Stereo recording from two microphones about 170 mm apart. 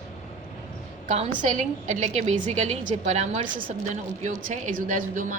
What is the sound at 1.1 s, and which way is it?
A woman's voice, 45° right (ahead or behind).